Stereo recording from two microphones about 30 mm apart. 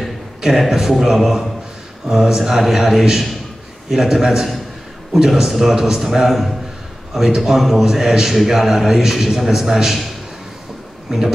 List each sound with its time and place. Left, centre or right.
0.6 s a man's voice: centre
6.2 s a man's voice: centre
7.2 s a man's voice: centre
11.1 s a man's voice: centre